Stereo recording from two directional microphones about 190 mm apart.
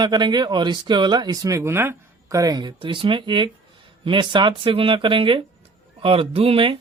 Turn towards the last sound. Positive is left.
turn(degrees=-30)  # may be behind; listen again after turning